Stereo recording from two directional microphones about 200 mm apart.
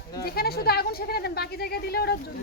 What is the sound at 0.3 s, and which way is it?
Speech, 50° left (ahead or behind).